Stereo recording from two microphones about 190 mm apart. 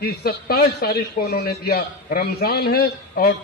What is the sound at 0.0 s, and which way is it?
A man's voice, 55° left (ahead or behind).